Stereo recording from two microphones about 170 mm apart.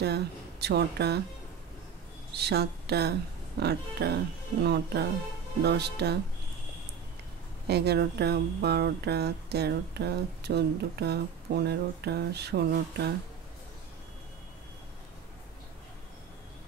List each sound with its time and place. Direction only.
0.0 s speech: 75° right (ahead or behind)
2.3 s speech: 70° right (ahead or behind)
7.6 s speech: 75° right (ahead or behind)